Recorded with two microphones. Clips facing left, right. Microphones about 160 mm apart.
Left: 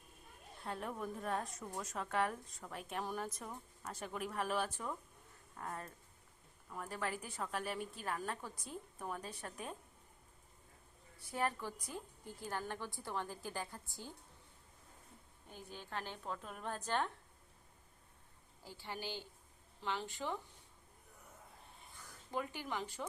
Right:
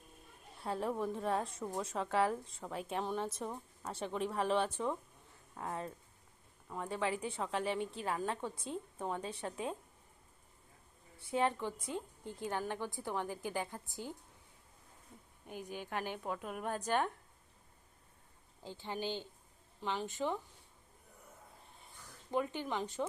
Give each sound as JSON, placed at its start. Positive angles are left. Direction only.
{"t": 0.7, "sound": "a woman's voice", "side_deg": -30}
{"t": 11.2, "sound": "a woman's voice", "side_deg": -25}
{"t": 15.4, "sound": "a woman's voice", "side_deg": -15}
{"t": 18.6, "sound": "a woman's voice", "side_deg": -20}
{"t": 22.3, "sound": "a woman's voice", "side_deg": -20}